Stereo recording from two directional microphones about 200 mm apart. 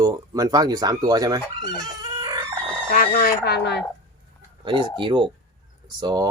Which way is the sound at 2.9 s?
45° left (ahead or behind).